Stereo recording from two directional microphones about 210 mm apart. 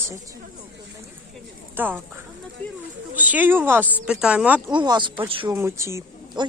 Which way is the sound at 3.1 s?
10° right (ahead or behind).